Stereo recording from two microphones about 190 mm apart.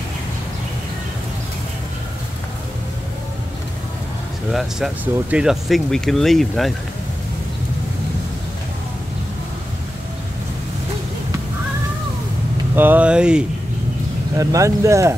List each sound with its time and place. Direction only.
4.5 s speech: centre (ahead or behind)
12.7 s speech: 10° right (ahead or behind)
14.3 s speech: 15° right (ahead or behind)